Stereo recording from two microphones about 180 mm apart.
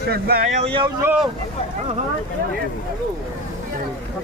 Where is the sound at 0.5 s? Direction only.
30° right (ahead or behind).